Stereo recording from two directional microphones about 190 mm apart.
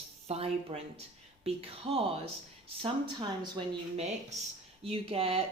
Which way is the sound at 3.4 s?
25° right (ahead or behind).